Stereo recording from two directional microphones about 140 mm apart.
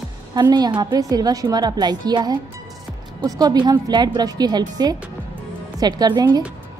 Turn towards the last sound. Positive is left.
turn(degrees=-30)  # may be behind; listen again after turning